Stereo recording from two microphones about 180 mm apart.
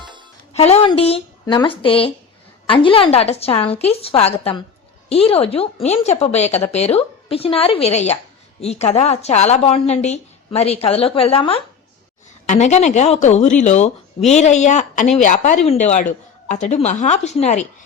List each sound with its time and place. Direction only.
0.0 s music: 25° right (ahead or behind)
0.5 s speech: 35° left (ahead or behind)